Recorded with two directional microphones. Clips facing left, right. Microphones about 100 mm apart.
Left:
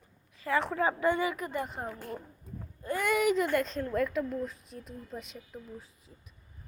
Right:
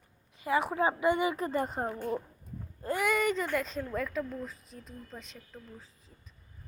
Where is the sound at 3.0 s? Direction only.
5° left (ahead or behind).